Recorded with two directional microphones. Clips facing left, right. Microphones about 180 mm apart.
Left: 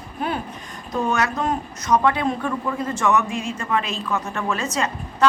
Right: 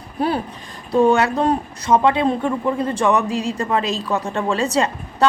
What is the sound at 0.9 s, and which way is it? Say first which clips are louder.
Speech: right 8 dB; 30° right (ahead or behind).